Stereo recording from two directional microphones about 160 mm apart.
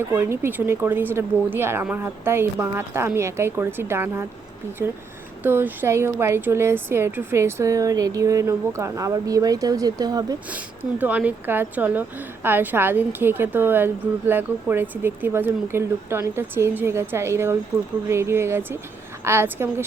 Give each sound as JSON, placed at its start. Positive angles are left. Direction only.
{"t": 0.1, "sound": "speech", "side_deg": -15}
{"t": 5.4, "sound": "speech", "side_deg": -15}
{"t": 10.5, "sound": "speech", "side_deg": -10}